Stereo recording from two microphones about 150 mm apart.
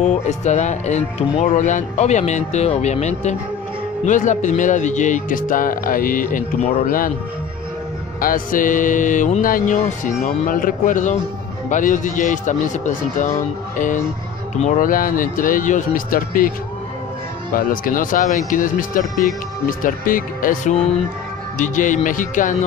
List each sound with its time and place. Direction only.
0.0 s speech: 50° left (ahead or behind)
8.2 s speech: 65° left (ahead or behind)
14.8 s speech: 70° left (ahead or behind)
17.6 s speech: 65° left (ahead or behind)